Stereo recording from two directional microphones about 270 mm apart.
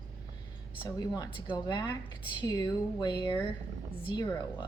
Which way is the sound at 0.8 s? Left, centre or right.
Centre.